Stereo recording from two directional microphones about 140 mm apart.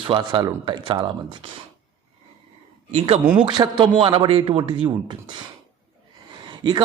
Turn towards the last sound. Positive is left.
turn(degrees=-35)  # may be behind; listen again after turning